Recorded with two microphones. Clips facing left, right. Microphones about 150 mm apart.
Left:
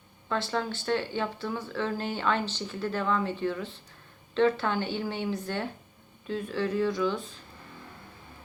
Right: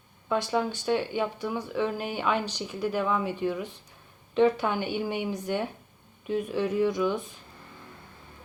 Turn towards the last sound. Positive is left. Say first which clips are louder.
# right 2 dB
turn(degrees=-20)  # may be behind; listen again after turning